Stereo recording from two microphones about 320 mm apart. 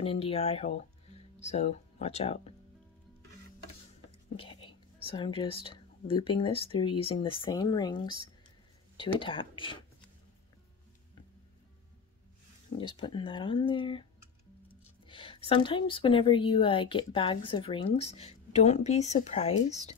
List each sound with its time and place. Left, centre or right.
0.0 s speech: centre
4.4 s whispering: centre
5.1 s a woman's voice: centre
9.2 s a woman's voice: centre
12.7 s a woman's voice: centre
15.0 s a woman's voice: centre